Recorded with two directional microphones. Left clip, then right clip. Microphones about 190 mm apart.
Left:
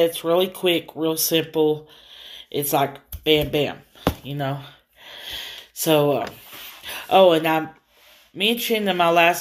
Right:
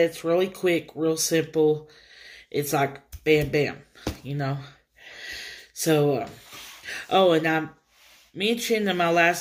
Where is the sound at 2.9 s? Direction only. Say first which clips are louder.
Left 2 dB; 45° left (ahead or behind).